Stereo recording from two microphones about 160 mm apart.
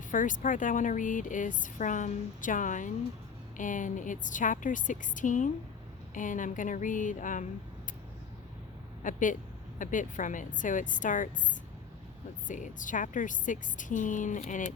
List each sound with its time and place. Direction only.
0.1 s speech: 55° left (ahead or behind)
9.0 s speech: 55° left (ahead or behind)
12.5 s speech: 55° left (ahead or behind)